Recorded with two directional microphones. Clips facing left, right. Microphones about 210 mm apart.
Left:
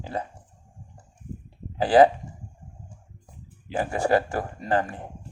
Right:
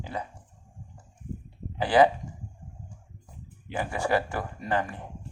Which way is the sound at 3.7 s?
35° left (ahead or behind).